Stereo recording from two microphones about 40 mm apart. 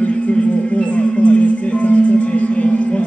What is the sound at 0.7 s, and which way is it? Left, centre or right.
Music, left.